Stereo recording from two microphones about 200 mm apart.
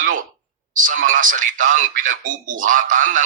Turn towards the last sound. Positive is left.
turn(degrees=-40)  # may be behind; listen again after turning